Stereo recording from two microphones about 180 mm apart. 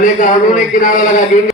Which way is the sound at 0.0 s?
45° left (ahead or behind).